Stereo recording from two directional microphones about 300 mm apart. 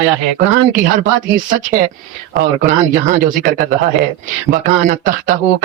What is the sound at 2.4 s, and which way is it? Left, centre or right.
Speech, right.